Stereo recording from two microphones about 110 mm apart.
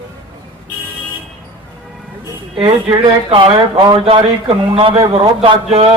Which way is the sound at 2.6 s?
45° right (ahead or behind).